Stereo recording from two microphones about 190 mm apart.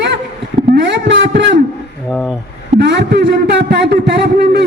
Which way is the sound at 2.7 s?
60° right (ahead or behind).